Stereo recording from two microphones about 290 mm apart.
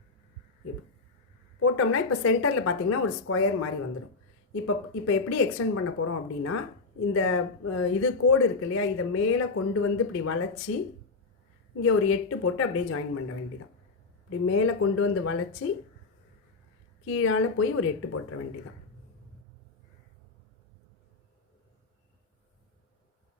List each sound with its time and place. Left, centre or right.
1.5 s speech: left
17.1 s speech: left